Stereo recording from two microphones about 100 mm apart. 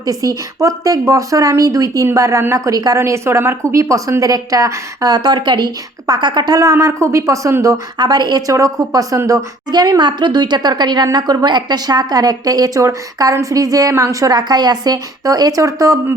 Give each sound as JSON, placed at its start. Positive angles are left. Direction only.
{"t": 0.0, "sound": "speech", "side_deg": -35}
{"t": 6.6, "sound": "speech", "side_deg": -30}
{"t": 7.9, "sound": "speech", "side_deg": -45}